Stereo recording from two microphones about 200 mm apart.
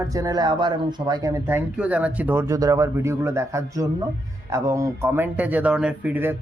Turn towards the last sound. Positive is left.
turn(degrees=-10)  # may be behind; listen again after turning